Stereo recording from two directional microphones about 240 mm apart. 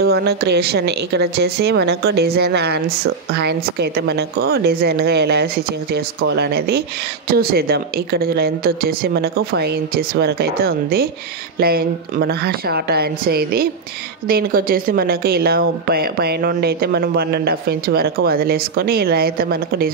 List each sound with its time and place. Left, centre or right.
0.0 s speech: right